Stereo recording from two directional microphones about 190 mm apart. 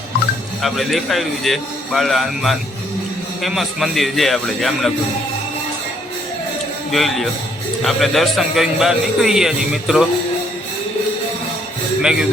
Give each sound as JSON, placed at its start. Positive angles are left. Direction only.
{"t": 0.6, "sound": "a man's voice", "side_deg": 0}
{"t": 6.9, "sound": "a man's voice", "side_deg": 0}